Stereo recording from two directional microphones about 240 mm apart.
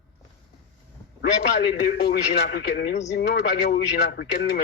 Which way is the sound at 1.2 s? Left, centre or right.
Left.